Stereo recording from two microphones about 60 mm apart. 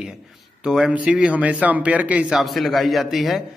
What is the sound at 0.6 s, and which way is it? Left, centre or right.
A man's voice, centre.